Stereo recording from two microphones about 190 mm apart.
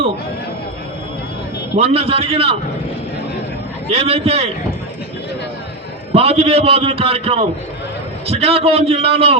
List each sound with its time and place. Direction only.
1.7 s a man's voice: 30° right (ahead or behind)
3.8 s a man's voice: 30° right (ahead or behind)
6.1 s a man's voice: 30° right (ahead or behind)